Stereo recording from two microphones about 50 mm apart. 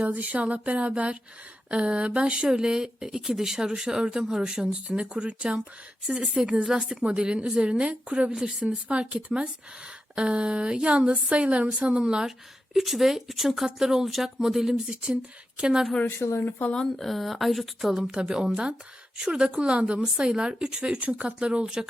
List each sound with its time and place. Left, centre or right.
0.1 s speech: right; by 4.7 s centre
4.7 s speech: right
8.4 s speech: centre
8.9 s speech: right
12.7 s speech: centre
16.0 s speech: left
16.7 s speech: centre
18.1 s speech: centre